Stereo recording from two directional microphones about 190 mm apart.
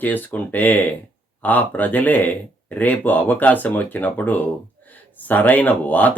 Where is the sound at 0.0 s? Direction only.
10° left (ahead or behind).